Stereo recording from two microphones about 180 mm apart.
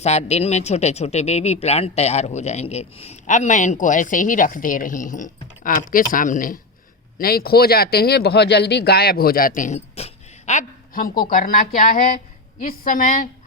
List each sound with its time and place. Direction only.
0.0 s a man's voice: 35° left (ahead or behind)